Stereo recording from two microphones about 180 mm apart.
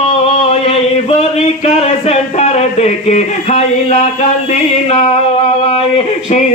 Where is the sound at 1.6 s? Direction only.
35° left (ahead or behind).